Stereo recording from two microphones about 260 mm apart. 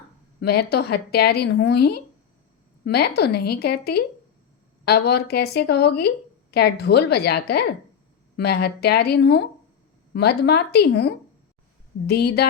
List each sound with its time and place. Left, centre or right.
0.4 s speech: left